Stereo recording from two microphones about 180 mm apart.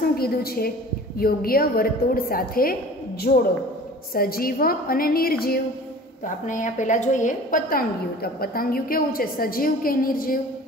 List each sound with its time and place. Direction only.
0.2 s a woman's voice: 55° left (ahead or behind)
6.2 s a woman's voice: 45° left (ahead or behind)